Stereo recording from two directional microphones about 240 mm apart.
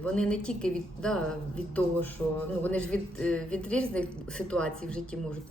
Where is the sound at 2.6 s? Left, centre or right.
Centre.